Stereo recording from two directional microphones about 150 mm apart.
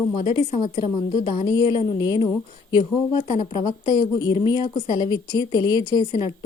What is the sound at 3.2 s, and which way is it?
Speech, 45° left (ahead or behind).